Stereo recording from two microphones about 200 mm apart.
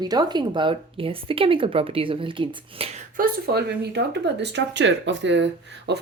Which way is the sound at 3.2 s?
50° right (ahead or behind).